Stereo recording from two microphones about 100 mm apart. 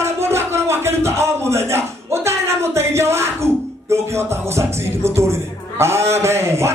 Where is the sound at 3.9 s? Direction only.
25° right (ahead or behind).